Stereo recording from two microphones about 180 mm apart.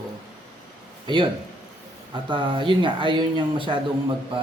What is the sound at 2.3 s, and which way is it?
Speech, 30° right (ahead or behind).